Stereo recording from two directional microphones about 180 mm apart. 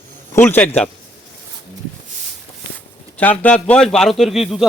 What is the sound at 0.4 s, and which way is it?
Speech, 10° left (ahead or behind).